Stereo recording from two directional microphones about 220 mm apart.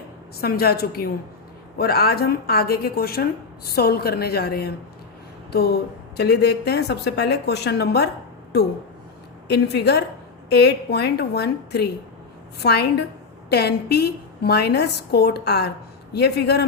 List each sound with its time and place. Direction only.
0.4 s speech: 45° left (ahead or behind)
9.5 s speech: 50° left (ahead or behind)